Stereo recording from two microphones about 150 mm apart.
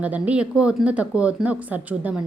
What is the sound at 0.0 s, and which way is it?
A woman's voice, 10° right (ahead or behind).